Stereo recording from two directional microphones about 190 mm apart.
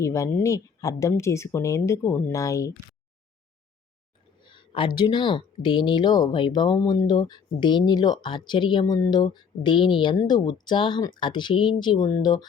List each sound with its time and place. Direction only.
0.0 s speech: 15° left (ahead or behind)
4.4 s a sound: 25° left (ahead or behind)
4.9 s speech: 25° left (ahead or behind)